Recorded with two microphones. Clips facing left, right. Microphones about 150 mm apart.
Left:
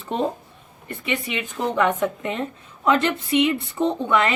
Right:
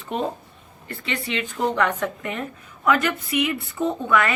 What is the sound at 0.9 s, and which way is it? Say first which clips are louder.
A woman's voice: left 1 dB; 15° left (ahead or behind).